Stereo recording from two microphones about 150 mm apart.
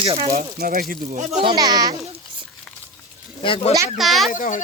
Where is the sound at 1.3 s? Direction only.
35° right (ahead or behind).